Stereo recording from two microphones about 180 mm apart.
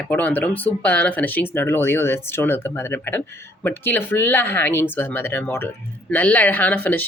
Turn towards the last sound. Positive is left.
turn(degrees=10)  # may be behind; listen again after turning